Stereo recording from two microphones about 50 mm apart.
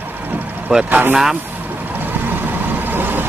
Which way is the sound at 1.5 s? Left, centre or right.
Right.